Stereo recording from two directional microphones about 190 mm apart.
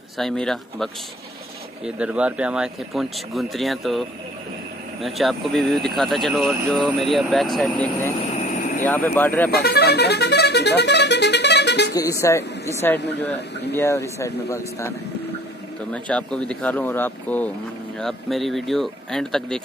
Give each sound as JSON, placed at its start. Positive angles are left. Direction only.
{"t": 0.2, "sound": "speech", "side_deg": 0}
{"t": 2.0, "sound": "speech", "side_deg": -5}
{"t": 5.0, "sound": "speech", "side_deg": 0}
{"t": 9.5, "sound": "speech", "side_deg": 55}
{"t": 11.9, "sound": "speech", "side_deg": 15}